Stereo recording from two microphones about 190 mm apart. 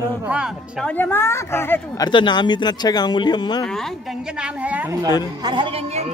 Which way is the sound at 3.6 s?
Centre (ahead or behind).